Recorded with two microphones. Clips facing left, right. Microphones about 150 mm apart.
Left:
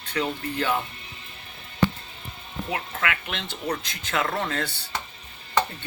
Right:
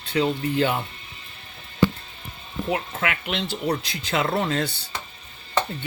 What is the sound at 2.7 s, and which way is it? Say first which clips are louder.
Speech: right 3 dB; 25° right (ahead or behind).